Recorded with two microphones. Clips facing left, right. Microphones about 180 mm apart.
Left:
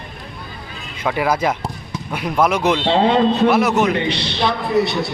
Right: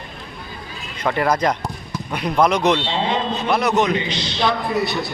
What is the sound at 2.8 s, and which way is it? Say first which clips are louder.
Speech: left 7 dB; 60° left (ahead or behind).